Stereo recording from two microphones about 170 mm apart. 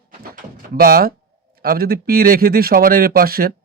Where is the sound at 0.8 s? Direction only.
60° right (ahead or behind).